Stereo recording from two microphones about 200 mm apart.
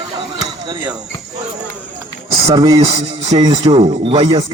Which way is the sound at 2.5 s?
20° right (ahead or behind).